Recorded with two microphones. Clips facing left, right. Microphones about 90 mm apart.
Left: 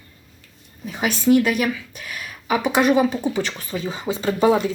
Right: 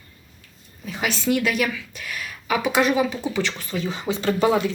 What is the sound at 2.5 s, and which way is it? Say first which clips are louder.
Speech: left 2 dB; 20° left (ahead or behind).